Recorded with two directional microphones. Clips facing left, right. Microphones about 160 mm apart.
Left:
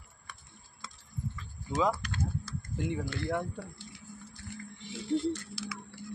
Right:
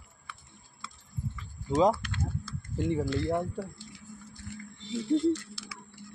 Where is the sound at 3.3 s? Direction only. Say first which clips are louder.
Right 3 dB; 30° right (ahead or behind).